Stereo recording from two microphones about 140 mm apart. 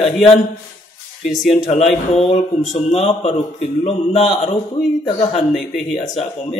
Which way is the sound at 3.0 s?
50° left (ahead or behind).